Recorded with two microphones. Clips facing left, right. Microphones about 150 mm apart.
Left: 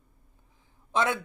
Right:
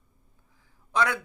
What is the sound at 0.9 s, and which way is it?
Speech, 25° left (ahead or behind).